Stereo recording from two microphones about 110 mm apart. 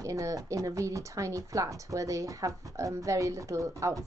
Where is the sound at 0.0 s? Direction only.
30° right (ahead or behind).